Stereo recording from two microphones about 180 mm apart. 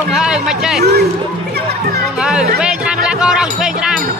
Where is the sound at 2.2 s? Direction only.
5° right (ahead or behind).